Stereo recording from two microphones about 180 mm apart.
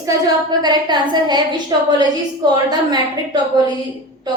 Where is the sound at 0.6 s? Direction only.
25° right (ahead or behind).